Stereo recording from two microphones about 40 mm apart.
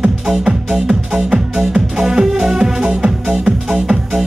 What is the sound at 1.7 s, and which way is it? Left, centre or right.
Music, centre.